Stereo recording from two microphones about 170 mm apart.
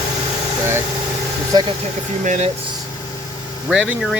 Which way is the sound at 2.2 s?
45° right (ahead or behind).